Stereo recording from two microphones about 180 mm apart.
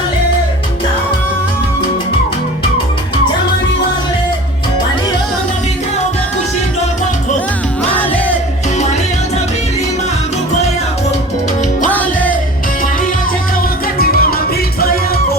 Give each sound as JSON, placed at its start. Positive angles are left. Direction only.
{"t": 11.9, "sound": "music", "side_deg": 10}
{"t": 14.0, "sound": "music", "side_deg": 55}